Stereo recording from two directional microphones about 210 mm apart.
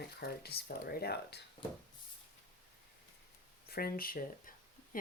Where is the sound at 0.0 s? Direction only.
50° left (ahead or behind).